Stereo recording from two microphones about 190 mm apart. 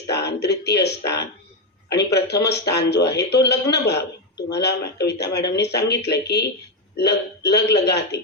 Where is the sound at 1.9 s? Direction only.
60° left (ahead or behind).